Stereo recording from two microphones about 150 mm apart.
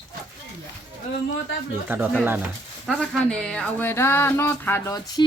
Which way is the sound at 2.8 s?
5° left (ahead or behind).